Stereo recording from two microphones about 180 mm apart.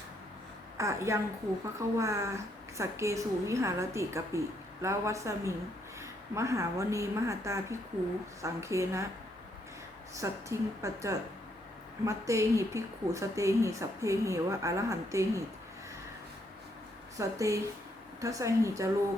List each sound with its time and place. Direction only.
0.8 s a woman's voice: 15° right (ahead or behind)
10.2 s a woman's voice: 15° right (ahead or behind)
17.2 s a woman's voice: 15° right (ahead or behind)